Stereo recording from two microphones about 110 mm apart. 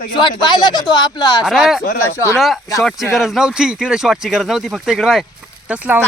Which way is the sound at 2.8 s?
Centre (ahead or behind).